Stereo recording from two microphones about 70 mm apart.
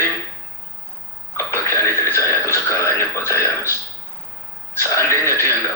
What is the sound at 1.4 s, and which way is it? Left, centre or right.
Throat clearing, left.